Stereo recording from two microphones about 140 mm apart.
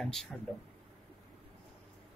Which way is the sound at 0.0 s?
5° left (ahead or behind).